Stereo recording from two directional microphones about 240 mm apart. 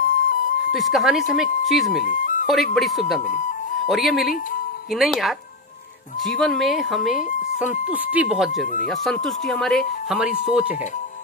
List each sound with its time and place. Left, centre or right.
0.0 s music: left
0.7 s speech: centre
2.0 s music: left
2.4 s speech: centre